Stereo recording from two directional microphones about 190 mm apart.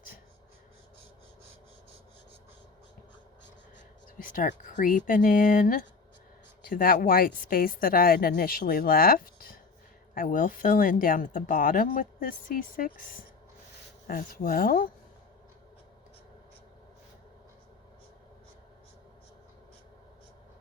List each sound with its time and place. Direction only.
4.2 s speech: 45° left (ahead or behind)